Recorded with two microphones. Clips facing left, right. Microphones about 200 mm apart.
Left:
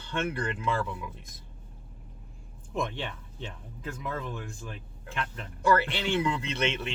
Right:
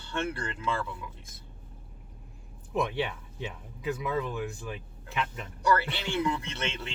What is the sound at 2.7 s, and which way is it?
Speech, 5° right (ahead or behind).